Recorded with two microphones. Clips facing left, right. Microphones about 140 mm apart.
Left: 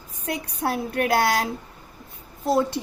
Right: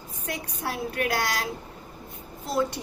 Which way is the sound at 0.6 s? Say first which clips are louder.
Left 5 dB; 45° left (ahead or behind).